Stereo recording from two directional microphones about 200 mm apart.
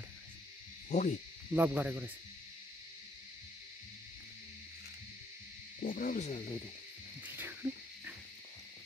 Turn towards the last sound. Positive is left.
turn(degrees=-10)  # may be behind; listen again after turning